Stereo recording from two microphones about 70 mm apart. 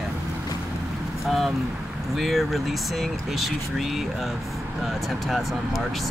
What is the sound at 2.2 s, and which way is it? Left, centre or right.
Speech, centre.